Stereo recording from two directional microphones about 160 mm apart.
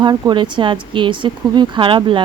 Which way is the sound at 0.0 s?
30° right (ahead or behind).